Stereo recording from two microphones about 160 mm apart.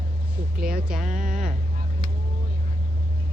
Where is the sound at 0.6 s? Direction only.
65° right (ahead or behind).